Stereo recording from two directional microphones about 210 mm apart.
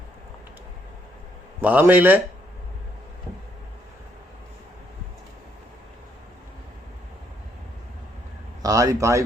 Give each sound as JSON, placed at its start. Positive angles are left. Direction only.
{"t": 1.6, "sound": "a man's voice", "side_deg": -10}
{"t": 8.6, "sound": "a man's voice", "side_deg": -15}